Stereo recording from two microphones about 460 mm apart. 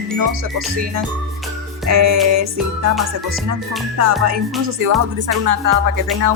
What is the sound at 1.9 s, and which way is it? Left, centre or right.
Music, right.